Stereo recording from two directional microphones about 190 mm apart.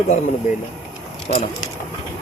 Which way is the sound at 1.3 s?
45° left (ahead or behind).